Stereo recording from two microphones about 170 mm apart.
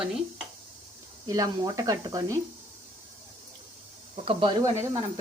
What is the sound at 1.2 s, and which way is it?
Speech, 20° right (ahead or behind).